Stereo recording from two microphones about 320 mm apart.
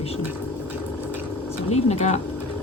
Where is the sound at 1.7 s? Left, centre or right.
Centre.